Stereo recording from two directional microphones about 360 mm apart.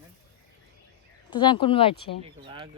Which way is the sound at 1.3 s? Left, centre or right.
Centre.